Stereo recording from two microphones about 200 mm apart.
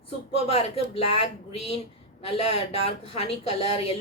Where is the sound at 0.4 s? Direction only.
30° left (ahead or behind).